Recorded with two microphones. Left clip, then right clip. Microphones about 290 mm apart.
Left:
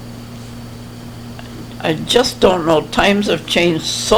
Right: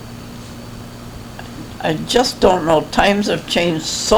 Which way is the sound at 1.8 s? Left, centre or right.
Left.